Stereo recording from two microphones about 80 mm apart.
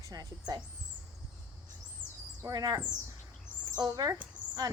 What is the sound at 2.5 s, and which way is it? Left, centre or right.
Speech, right.